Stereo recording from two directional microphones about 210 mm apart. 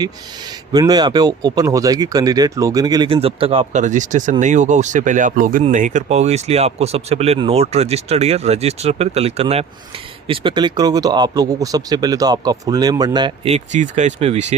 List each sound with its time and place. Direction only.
0.7 s speech: 20° right (ahead or behind)